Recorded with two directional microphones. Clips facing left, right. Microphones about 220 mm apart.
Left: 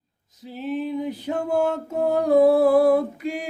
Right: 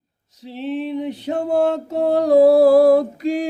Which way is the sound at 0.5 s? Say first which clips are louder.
Right 2 dB; 25° right (ahead or behind).